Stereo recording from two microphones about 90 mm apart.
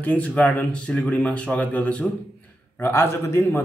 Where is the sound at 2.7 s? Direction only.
25° left (ahead or behind).